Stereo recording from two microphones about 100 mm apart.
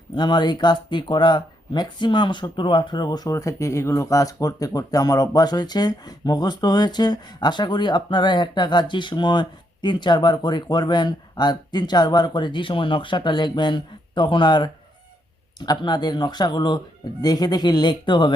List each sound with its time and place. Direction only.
0.2 s speech: 50° left (ahead or behind)
3.3 s speech: 30° left (ahead or behind); by 18.3 s 50° left (ahead or behind)